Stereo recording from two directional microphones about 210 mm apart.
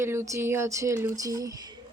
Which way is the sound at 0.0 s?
10° right (ahead or behind).